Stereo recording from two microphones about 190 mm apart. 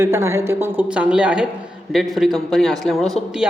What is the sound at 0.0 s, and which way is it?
A woman's voice, 15° right (ahead or behind).